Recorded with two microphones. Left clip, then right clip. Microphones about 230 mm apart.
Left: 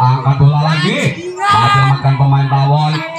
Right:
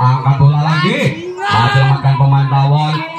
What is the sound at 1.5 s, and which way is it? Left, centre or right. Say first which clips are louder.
Music: left 3 dB; left.